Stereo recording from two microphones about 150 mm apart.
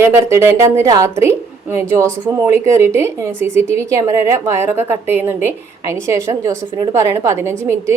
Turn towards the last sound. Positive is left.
turn(degrees=-20)  # may be behind; listen again after turning